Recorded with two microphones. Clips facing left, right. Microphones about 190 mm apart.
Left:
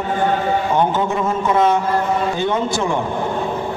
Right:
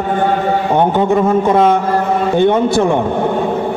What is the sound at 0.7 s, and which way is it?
A man's voice, 55° right (ahead or behind).